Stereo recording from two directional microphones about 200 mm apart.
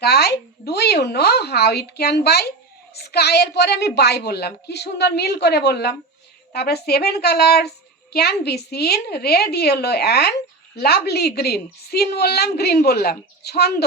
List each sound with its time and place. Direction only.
0.0 s a woman's voice: 55° left (ahead or behind)